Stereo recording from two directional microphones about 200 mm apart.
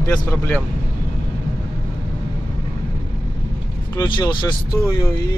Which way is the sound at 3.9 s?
20° left (ahead or behind).